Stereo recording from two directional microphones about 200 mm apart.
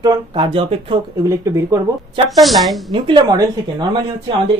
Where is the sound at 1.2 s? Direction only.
15° right (ahead or behind).